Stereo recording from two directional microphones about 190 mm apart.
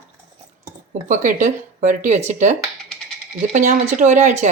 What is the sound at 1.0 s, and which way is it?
A woman's voice, 40° right (ahead or behind).